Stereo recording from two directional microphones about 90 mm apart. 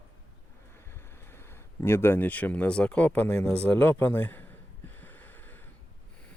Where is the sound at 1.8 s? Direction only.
25° left (ahead or behind).